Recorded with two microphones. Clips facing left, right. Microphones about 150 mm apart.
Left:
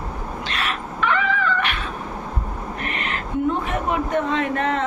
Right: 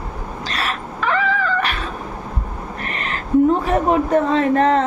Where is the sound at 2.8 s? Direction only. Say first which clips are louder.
Right 1 dB; 35° right (ahead or behind).